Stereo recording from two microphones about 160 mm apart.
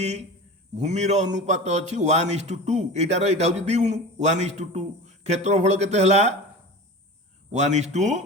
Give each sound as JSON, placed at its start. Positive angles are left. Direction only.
{"t": 0.0, "sound": "a man's voice", "side_deg": -45}
{"t": 7.5, "sound": "a man's voice", "side_deg": -45}